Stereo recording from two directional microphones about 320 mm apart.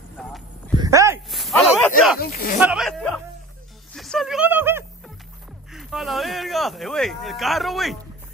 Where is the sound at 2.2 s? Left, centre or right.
Left.